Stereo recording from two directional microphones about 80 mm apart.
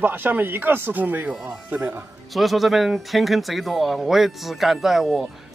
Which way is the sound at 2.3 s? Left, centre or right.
Centre.